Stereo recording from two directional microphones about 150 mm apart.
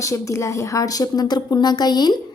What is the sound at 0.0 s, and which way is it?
A woman's voice, 20° left (ahead or behind).